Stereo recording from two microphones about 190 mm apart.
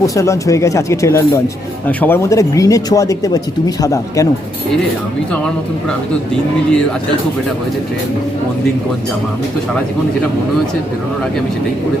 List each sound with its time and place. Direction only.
0.0 s speech: 15° left (ahead or behind)